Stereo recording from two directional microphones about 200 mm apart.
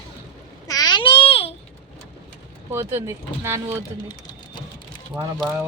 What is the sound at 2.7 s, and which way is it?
Speech, 10° right (ahead or behind).